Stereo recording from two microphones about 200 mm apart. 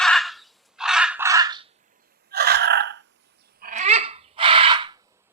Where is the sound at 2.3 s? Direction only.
55° right (ahead or behind).